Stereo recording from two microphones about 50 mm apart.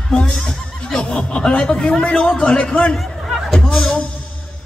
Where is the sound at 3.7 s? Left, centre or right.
Centre.